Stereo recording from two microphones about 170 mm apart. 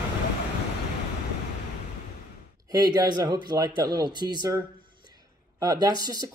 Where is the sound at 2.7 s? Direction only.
20° right (ahead or behind).